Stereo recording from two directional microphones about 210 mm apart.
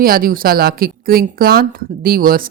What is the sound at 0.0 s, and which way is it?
A woman's voice, 45° right (ahead or behind).